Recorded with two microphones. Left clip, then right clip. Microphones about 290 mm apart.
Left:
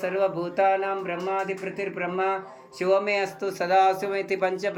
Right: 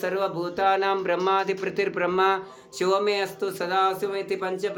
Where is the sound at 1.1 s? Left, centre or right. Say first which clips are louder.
Right 5 dB; right.